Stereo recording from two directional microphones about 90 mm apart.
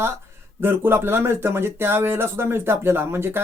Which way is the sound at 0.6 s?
25° right (ahead or behind).